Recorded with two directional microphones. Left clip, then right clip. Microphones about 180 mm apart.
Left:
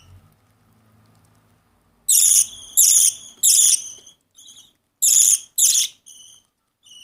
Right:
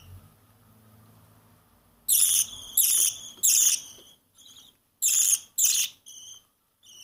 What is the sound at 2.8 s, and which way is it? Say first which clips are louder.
Cricket: left 10 dB; centre (ahead or behind).